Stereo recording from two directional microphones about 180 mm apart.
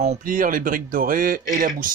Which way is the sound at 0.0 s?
45° right (ahead or behind).